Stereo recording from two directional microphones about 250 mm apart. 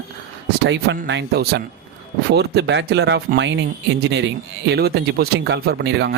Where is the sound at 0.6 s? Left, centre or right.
Right.